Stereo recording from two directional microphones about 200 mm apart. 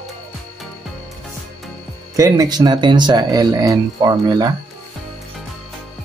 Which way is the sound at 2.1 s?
15° right (ahead or behind).